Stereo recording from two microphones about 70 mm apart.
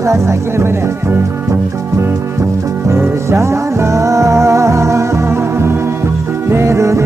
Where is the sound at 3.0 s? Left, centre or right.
Right.